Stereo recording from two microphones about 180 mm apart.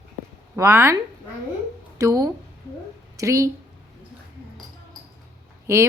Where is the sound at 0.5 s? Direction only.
15° right (ahead or behind).